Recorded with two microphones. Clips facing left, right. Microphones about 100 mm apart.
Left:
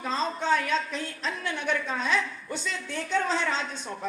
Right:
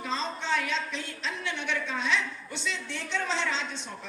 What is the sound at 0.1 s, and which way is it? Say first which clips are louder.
A woman's voice: left 5 dB; 45° left (ahead or behind).